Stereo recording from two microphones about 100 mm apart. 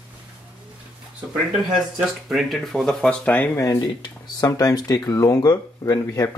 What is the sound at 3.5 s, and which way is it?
Speech, 35° left (ahead or behind).